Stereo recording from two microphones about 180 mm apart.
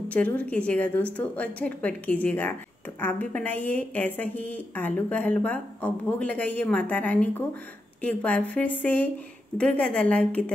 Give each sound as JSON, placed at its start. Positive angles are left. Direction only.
{"t": 0.1, "sound": "a woman's voice", "side_deg": 10}